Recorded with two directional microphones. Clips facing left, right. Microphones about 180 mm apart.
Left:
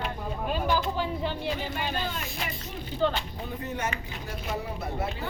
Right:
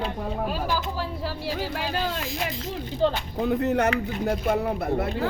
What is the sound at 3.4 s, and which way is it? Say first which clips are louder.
Speech: right 13 dB; 75° right (ahead or behind).